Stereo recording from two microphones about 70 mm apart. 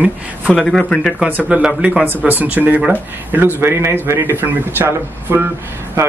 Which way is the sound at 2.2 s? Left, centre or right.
Right.